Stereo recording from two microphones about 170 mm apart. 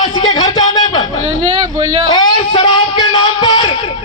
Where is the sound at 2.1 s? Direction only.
30° left (ahead or behind).